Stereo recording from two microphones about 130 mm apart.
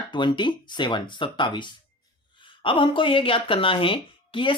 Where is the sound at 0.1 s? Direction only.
35° left (ahead or behind).